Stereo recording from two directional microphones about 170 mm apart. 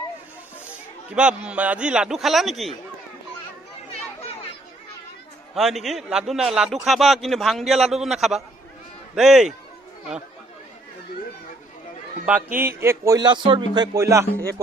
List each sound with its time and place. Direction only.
1.1 s a man's voice: 5° right (ahead or behind)
4.2 s chatter: 40° left (ahead or behind)
5.5 s a man's voice: centre (ahead or behind)
12.5 s speech: 15° right (ahead or behind)
13.9 s speech: 15° right (ahead or behind)